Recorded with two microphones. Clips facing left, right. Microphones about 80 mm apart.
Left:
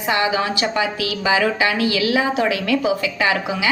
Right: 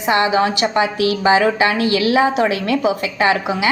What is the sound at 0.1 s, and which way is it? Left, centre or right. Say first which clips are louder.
A woman's voice: right 4 dB; right.